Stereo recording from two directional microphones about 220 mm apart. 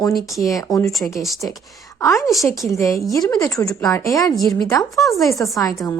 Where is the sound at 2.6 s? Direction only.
15° left (ahead or behind).